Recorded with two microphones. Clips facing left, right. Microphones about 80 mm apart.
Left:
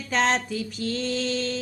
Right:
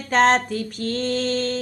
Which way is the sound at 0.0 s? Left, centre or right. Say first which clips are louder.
Right 6 dB; right.